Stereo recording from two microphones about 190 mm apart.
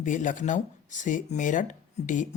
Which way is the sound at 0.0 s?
40° left (ahead or behind).